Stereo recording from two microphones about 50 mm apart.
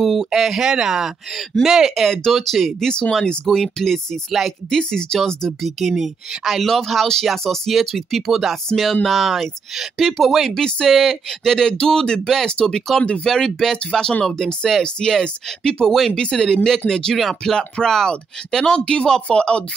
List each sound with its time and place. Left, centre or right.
0.0 s speech: centre
2.0 s speech: centre
2.8 s speech: centre
17.6 s speech: centre